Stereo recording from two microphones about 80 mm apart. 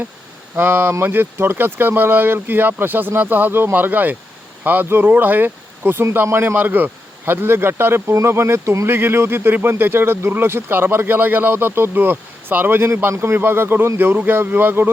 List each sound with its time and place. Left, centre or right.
0.5 s speech: right